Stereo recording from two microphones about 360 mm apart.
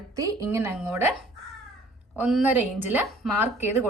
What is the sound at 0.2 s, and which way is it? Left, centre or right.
Speech, centre.